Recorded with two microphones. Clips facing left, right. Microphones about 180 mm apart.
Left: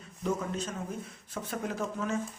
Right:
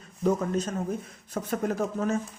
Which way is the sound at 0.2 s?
40° right (ahead or behind).